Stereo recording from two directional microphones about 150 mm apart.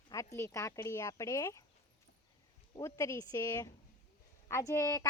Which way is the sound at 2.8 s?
20° left (ahead or behind).